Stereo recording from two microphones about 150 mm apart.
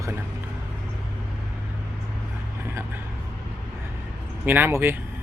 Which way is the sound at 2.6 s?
15° right (ahead or behind).